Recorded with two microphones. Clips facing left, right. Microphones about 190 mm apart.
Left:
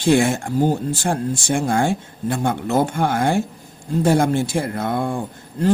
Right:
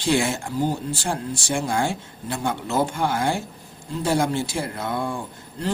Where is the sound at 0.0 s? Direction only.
50° left (ahead or behind).